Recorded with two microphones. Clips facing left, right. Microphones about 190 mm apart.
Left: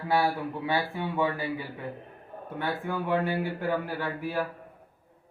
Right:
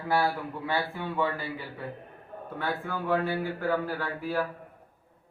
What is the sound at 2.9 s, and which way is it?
Speech, 15° left (ahead or behind).